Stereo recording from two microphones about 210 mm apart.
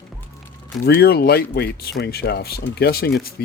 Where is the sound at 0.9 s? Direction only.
50° left (ahead or behind).